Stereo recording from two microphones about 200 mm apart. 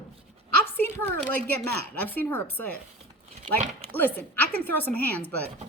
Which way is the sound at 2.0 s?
10° left (ahead or behind).